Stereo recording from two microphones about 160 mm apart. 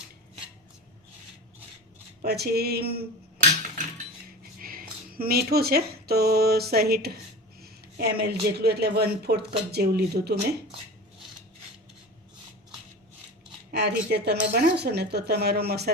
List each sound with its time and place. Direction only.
2.2 s speech: 85° right
4.5 s speech: 65° right (ahead or behind); by 10.3 s 80° right
13.7 s speech: 90° right